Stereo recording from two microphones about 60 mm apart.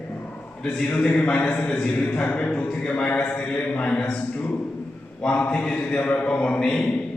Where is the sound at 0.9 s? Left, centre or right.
Left.